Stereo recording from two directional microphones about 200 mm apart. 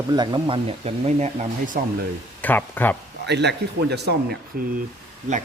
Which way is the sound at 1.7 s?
45° right (ahead or behind).